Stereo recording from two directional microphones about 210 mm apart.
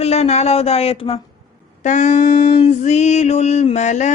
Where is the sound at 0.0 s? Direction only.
30° left (ahead or behind).